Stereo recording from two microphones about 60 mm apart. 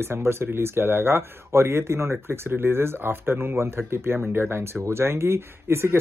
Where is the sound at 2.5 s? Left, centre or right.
Right.